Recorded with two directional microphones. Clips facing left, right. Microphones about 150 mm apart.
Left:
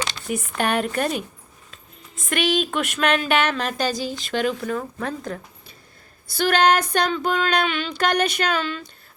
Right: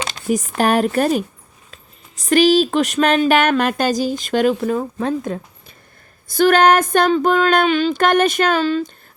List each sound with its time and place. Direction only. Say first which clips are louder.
0.1 s a sound: right 8 dB; 45° right (ahead or behind)
0.5 s a woman's voice: right 6 dB; 40° right (ahead or behind)
2.3 s female singing: right 9 dB; 35° right (ahead or behind)
4.6 s speech: right 7 dB; 30° right (ahead or behind)
6.2 s female singing: right 6 dB; 50° right (ahead or behind)